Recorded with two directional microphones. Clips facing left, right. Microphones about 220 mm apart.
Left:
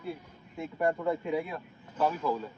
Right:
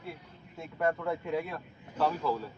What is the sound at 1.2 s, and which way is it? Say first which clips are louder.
Speech: left 1 dB; 15° left (ahead or behind).